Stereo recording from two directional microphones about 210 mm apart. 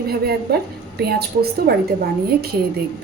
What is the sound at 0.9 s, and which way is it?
Speech, 50° right (ahead or behind).